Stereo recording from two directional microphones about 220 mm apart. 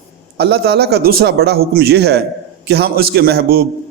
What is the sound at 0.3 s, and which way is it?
A man's voice, 50° right (ahead or behind).